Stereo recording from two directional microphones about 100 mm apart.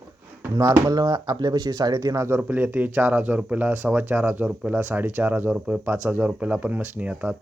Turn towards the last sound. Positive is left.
turn(degrees=-15)  # may be behind; listen again after turning